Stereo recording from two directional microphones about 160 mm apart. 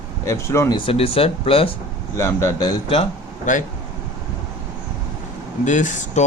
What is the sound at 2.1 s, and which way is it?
Speech, 20° left (ahead or behind).